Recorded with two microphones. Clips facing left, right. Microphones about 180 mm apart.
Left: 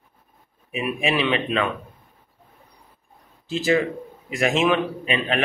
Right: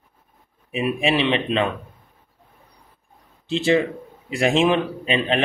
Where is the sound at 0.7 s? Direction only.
30° right (ahead or behind).